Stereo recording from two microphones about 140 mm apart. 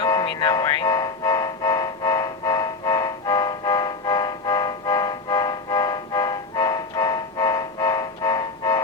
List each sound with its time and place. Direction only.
0.0 s music: 35° left (ahead or behind)